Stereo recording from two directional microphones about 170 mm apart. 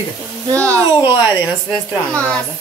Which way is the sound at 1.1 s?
10° right (ahead or behind).